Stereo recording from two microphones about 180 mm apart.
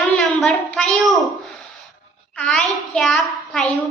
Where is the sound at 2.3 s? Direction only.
5° left (ahead or behind).